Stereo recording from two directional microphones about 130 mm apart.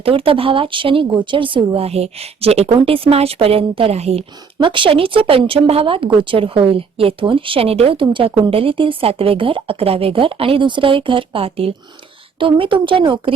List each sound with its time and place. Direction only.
0.0 s speech: 45° right (ahead or behind)
4.6 s a woman's voice: 40° right (ahead or behind)